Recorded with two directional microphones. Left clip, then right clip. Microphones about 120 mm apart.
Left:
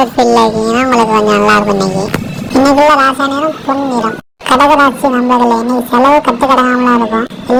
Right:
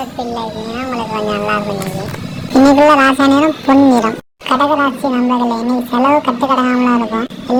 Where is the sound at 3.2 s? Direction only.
25° right (ahead or behind).